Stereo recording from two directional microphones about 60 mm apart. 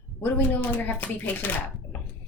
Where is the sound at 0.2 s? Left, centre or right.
Left.